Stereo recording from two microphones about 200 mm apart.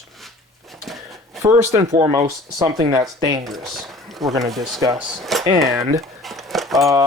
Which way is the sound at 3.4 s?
Centre (ahead or behind).